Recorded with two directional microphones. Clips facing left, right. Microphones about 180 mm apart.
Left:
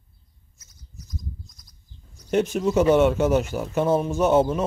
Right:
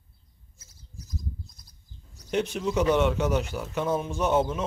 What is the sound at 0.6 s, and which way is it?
Bird, 30° right (ahead or behind).